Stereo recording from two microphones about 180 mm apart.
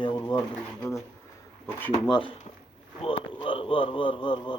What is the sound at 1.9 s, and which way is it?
A man's voice, 25° left (ahead or behind).